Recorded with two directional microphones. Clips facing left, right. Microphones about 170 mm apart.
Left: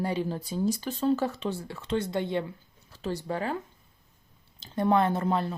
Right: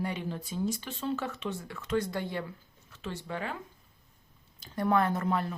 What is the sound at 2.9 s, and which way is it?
Speech, 40° left (ahead or behind).